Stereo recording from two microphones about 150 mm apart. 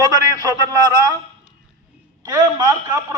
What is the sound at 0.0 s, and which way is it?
A man's voice, 25° right (ahead or behind).